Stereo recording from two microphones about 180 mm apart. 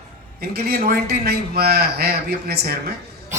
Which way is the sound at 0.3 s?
60° right (ahead or behind).